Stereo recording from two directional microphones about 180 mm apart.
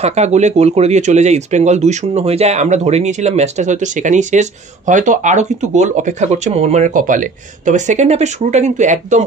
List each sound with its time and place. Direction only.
0.0 s speech: 40° right (ahead or behind)